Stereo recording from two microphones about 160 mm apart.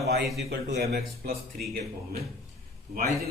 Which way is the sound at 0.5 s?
75° right (ahead or behind).